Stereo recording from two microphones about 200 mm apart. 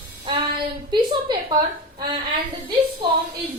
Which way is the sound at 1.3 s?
25° right (ahead or behind).